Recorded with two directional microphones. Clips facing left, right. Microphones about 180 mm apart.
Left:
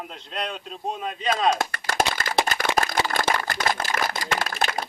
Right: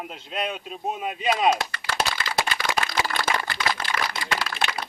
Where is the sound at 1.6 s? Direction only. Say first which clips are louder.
Left 3 dB; 45° left (ahead or behind).